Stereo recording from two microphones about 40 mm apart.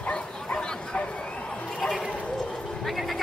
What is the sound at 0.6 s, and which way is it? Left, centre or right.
Bow-wow, left.